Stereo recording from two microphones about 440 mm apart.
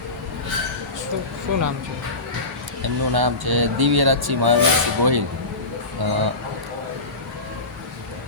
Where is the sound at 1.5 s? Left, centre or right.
Right.